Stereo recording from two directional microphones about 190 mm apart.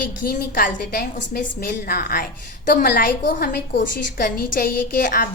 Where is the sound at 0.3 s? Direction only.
50° left (ahead or behind).